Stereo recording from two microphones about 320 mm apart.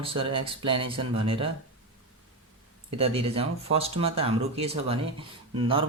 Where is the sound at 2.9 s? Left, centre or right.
Centre.